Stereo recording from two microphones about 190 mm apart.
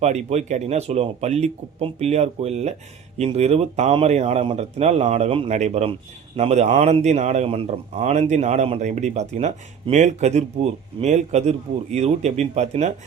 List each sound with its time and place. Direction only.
0.0 s speech: 35° right (ahead or behind)